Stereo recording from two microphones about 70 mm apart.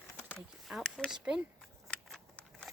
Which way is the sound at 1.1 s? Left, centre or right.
Centre.